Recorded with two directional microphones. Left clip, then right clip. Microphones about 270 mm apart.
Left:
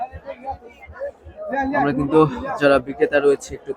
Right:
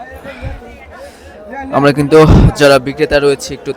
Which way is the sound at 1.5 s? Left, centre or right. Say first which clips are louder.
Right 8 dB; right.